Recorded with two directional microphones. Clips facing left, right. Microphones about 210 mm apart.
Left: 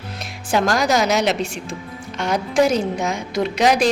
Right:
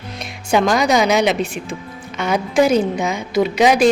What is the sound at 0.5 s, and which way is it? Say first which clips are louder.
A woman's voice: right 3 dB; centre (ahead or behind).